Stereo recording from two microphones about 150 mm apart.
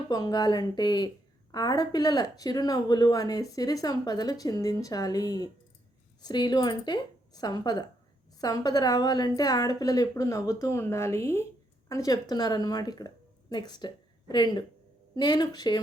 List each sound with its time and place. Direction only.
0.1 s speech: 25° left (ahead or behind)